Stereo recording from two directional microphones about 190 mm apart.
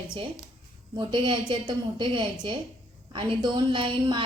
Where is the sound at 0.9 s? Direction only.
25° right (ahead or behind).